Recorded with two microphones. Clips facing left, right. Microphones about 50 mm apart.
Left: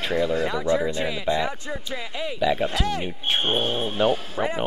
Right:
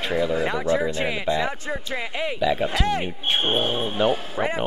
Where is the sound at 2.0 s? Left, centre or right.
Right.